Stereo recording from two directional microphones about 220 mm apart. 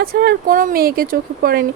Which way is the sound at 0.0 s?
45° right (ahead or behind).